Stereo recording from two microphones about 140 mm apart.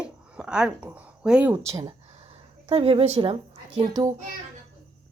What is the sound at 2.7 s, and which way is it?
Speech, 40° right (ahead or behind).